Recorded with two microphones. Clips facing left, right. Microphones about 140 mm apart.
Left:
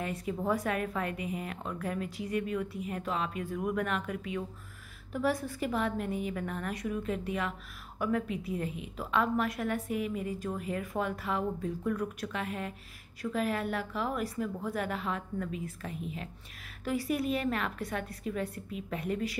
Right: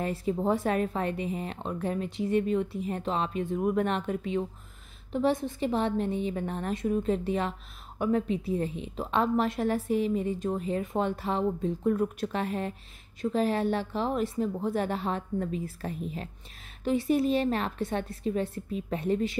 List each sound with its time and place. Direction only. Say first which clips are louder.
0.0 s a woman's voice: right 5 dB; 30° right (ahead or behind)
16.8 s a woman's voice: right 6 dB; 25° right (ahead or behind)